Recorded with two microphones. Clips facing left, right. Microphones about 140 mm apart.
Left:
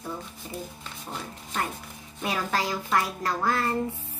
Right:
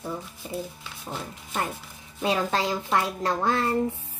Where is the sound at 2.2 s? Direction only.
25° right (ahead or behind).